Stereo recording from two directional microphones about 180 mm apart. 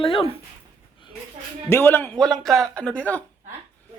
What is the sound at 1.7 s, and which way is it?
Speech, 10° left (ahead or behind).